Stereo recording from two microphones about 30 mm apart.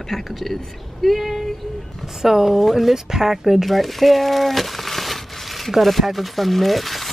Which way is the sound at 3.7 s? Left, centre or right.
Centre.